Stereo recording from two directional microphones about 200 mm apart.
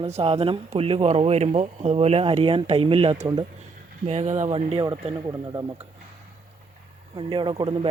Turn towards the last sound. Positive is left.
turn(degrees=-25)  # may be behind; listen again after turning